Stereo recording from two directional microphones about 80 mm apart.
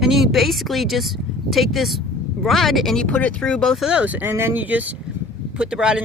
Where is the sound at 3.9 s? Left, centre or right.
Centre.